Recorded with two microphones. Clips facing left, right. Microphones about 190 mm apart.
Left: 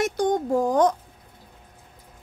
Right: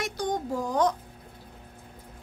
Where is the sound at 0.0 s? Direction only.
50° left (ahead or behind).